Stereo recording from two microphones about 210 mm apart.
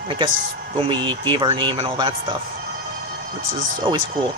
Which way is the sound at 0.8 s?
20° right (ahead or behind).